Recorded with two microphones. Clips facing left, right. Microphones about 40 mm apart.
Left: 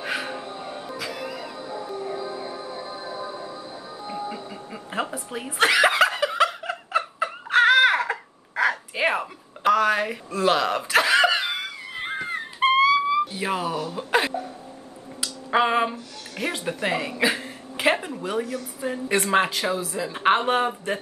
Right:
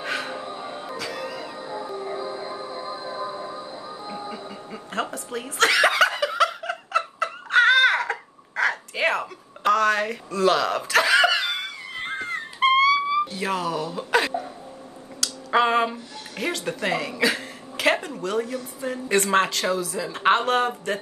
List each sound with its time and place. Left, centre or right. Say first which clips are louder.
0.0 s music: even; centre
0.6 s music: right 1 dB; centre
0.9 s music: right 1 dB; centre
1.6 s music: even; centre
4.3 s snicker: even; centre
7.8 s a sound: even; centre
13.7 s speech: right 1 dB; centre
15.1 s a sound: right 1 dB; centre
15.6 s music: right 1 dB; centre
15.9 s speech: even; centre
16.6 s a sound: left 1 dB; centre
19.0 s speech: right 1 dB; centre